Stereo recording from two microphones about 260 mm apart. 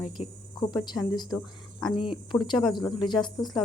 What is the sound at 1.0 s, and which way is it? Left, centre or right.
Speech, centre.